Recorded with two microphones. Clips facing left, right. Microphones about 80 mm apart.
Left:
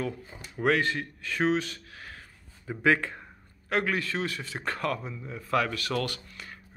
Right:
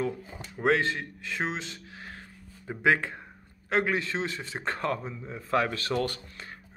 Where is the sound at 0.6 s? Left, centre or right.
Right.